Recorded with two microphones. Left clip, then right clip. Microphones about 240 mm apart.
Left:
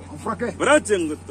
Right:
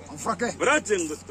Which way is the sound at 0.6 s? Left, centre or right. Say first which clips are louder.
Left 6 dB; left.